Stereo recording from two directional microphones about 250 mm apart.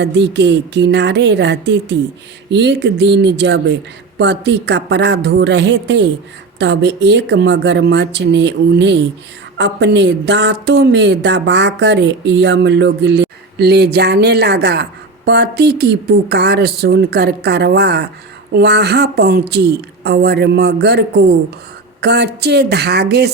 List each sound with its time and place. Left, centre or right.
0.0 s a woman's voice: right